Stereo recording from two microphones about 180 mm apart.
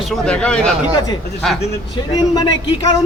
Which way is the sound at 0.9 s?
20° left (ahead or behind).